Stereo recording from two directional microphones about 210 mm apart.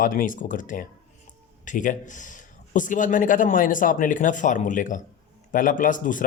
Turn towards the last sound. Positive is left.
turn(degrees=40)  # may be behind; listen again after turning